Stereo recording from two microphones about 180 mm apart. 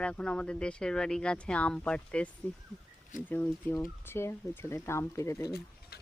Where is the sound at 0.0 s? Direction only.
5° left (ahead or behind).